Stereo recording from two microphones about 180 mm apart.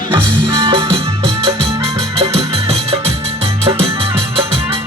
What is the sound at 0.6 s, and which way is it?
Music, 30° right (ahead or behind).